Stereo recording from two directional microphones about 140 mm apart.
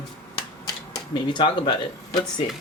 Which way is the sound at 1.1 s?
35° left (ahead or behind).